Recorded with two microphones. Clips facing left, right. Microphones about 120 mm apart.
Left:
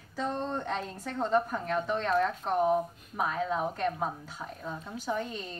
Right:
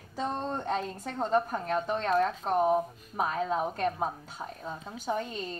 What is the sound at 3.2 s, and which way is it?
Speech, 25° right (ahead or behind).